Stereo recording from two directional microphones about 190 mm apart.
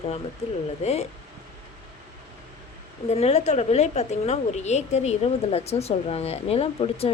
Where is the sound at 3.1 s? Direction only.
35° left (ahead or behind).